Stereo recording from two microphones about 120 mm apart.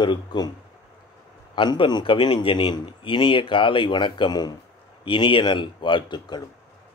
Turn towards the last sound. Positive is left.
turn(degrees=40)  # may be behind; listen again after turning